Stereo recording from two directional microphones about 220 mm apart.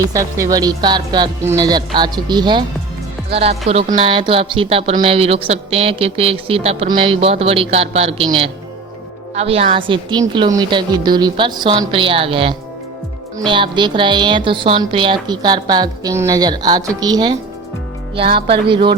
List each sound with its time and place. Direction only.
0.1 s speech: 15° right (ahead or behind)